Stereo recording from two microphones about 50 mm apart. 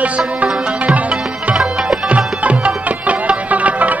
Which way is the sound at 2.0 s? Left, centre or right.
Right.